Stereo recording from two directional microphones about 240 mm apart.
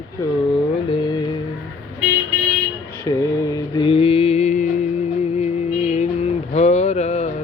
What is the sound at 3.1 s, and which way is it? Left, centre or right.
Music, centre.